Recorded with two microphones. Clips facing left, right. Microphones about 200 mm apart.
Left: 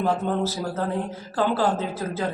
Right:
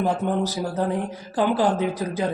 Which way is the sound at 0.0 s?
15° right (ahead or behind).